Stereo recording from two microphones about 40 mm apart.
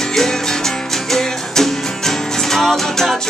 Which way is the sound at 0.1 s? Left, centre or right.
Centre.